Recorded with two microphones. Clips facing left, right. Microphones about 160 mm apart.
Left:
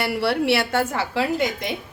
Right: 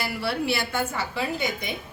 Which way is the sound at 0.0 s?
70° left (ahead or behind).